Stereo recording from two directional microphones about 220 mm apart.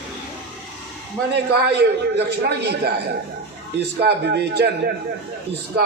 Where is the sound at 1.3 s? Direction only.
50° right (ahead or behind).